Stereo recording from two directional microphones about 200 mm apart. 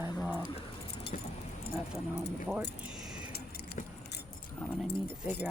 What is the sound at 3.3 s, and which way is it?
Keys jangling, 50° left (ahead or behind).